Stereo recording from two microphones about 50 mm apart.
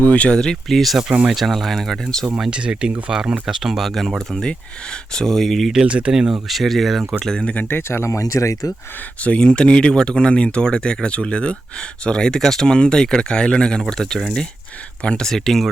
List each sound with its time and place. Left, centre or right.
0.1 s speech: left
0.5 s speech: centre
2.5 s speech: centre
4.3 s speech: centre
5.8 s speech: right
6.5 s speech: centre
7.4 s speech: left
7.7 s speech: left
9.2 s speech: left; by 14.4 s centre
15.0 s speech: left
15.3 s speech: centre